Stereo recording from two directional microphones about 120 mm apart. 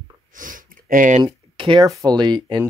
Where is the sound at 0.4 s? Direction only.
90° right.